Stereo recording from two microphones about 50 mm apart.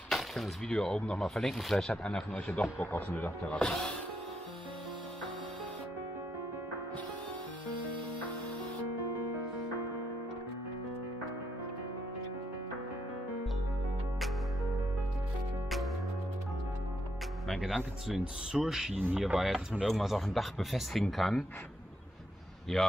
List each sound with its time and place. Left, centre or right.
0.7 s speech: centre
2.3 s speech: left
3.4 s speech: left
17.5 s music: centre
18.2 s a man's voice: centre
22.7 s speech: centre